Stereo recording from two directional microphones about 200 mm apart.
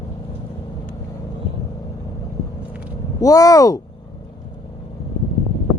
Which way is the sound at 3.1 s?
15° left (ahead or behind).